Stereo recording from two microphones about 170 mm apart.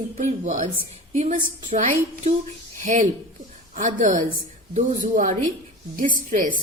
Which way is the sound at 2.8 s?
50° right (ahead or behind).